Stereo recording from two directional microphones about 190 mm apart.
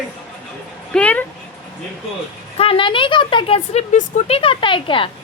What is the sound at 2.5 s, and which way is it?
A woman's voice, 30° left (ahead or behind).